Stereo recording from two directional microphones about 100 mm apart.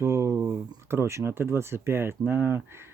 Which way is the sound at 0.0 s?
30° right (ahead or behind).